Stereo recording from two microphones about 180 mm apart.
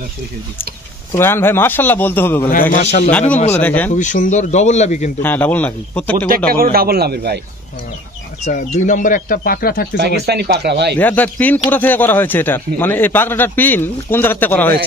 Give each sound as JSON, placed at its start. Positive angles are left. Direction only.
{"t": 1.1, "sound": "speech", "side_deg": 15}
{"t": 2.7, "sound": "a man's voice", "side_deg": 40}
{"t": 3.1, "sound": "speech", "side_deg": 10}
{"t": 3.9, "sound": "speech", "side_deg": 45}
{"t": 5.2, "sound": "speech", "side_deg": 10}
{"t": 6.5, "sound": "speech", "side_deg": -55}
{"t": 8.5, "sound": "speech", "side_deg": 40}
{"t": 9.9, "sound": "speech", "side_deg": -65}
{"t": 11.0, "sound": "speech", "side_deg": 10}